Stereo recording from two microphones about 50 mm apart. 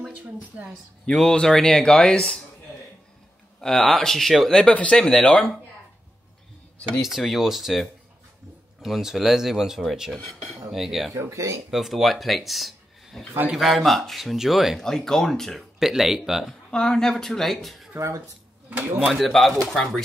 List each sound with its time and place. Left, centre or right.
1.0 s speech: centre
3.6 s speech: centre
4.5 s speech: centre
4.7 s speech: left
7.0 s speech: centre
11.1 s speech: right
11.7 s speech: centre
14.8 s speech: centre
15.8 s speech: centre
16.7 s speech: centre
17.9 s speech: right
18.7 s speech: right
19.1 s speech: centre